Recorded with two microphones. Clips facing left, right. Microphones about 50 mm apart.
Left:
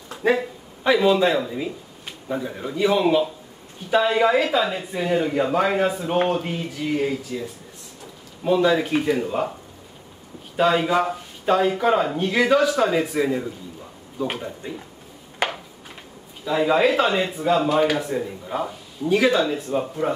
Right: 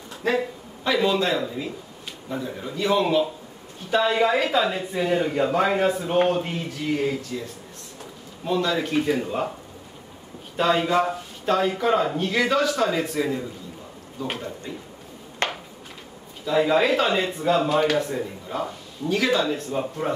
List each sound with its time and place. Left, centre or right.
0.2 s speech: centre
10.5 s speech: centre
15.4 s a sound: centre
16.4 s speech: centre